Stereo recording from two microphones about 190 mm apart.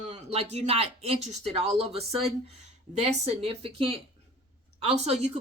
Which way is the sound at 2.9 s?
35° right (ahead or behind).